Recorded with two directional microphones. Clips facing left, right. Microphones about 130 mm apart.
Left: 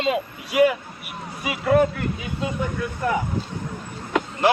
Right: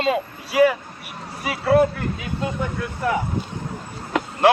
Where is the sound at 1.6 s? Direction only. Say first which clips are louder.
Right 1 dB; 35° right (ahead or behind).